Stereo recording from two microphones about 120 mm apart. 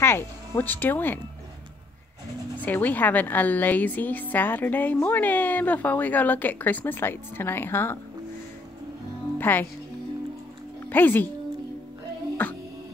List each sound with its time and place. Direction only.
0.0 s speech: 20° left (ahead or behind)
2.6 s a woman's voice: 15° left (ahead or behind)
9.4 s a woman's voice: 15° left (ahead or behind)
10.9 s speech: 15° left (ahead or behind)
12.4 s a woman's voice: 15° left (ahead or behind)